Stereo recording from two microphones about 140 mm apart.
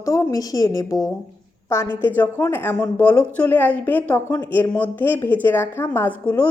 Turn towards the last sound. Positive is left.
turn(degrees=10)  # may be behind; listen again after turning